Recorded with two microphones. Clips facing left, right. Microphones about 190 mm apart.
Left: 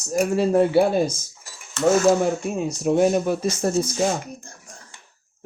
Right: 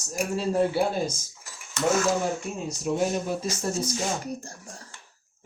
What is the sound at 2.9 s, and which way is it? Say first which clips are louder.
Speech: left 7 dB; 65° left (ahead or behind).